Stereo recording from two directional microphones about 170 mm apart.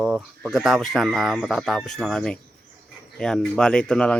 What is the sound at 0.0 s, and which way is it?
Speech, 5° right (ahead or behind).